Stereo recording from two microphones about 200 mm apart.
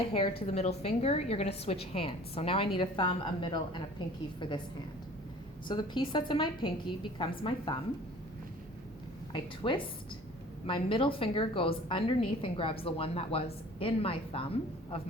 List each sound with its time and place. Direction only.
0.4 s a woman's voice: 30° left (ahead or behind)
5.6 s a woman's voice: 25° left (ahead or behind)
9.3 s a woman's voice: 25° left (ahead or behind)